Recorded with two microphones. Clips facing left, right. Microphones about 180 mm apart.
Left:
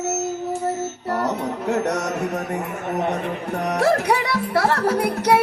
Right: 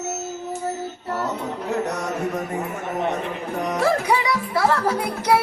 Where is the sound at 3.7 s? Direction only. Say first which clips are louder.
Left 2 dB; 65° left (ahead or behind).